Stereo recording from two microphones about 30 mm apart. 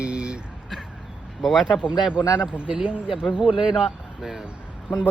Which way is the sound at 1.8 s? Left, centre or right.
Right.